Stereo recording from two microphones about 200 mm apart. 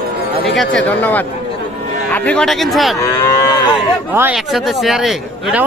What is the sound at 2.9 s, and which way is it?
Moo, 15° left (ahead or behind).